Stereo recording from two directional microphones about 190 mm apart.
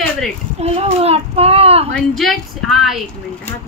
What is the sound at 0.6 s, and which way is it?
A child's voice, 35° right (ahead or behind).